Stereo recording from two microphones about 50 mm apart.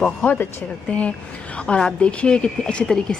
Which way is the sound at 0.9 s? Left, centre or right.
Left.